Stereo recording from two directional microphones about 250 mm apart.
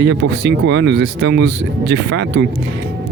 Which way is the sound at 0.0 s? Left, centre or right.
Right.